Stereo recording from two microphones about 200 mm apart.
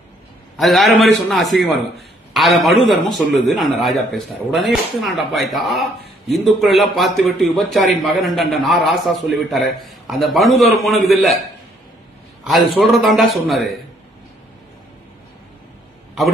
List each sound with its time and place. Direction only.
0.6 s a man's voice: centre (ahead or behind)
12.4 s a man's voice: centre (ahead or behind)